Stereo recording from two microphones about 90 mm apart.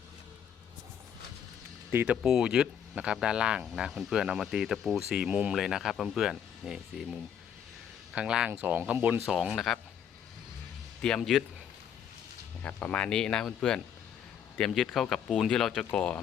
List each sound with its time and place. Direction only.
2.0 s speech: 5° right (ahead or behind); by 9.2 s 20° right (ahead or behind)
9.2 s speech: 5° right (ahead or behind)
11.0 s speech: 5° left (ahead or behind)
12.6 s speech: 15° left (ahead or behind)